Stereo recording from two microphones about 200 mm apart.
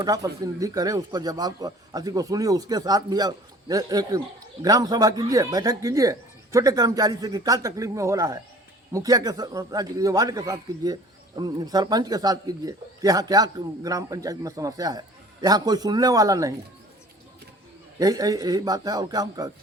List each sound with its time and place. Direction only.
0.0 s speech: 20° right (ahead or behind)
18.0 s speech: 20° right (ahead or behind)